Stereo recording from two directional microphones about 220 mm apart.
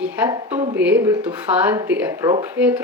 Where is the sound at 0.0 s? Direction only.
10° right (ahead or behind).